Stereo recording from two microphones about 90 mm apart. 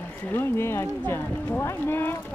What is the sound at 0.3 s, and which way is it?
Speech, 25° left (ahead or behind).